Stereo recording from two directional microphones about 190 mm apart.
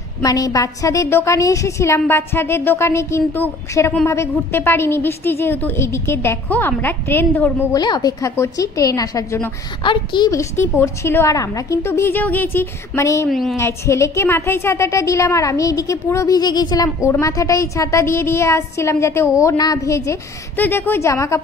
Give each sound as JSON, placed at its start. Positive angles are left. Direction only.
{"t": 0.2, "sound": "a woman's voice", "side_deg": 20}
{"t": 7.7, "sound": "a woman's voice", "side_deg": 20}
{"t": 13.3, "sound": "a woman's voice", "side_deg": 0}
{"t": 13.6, "sound": "a woman's voice", "side_deg": 15}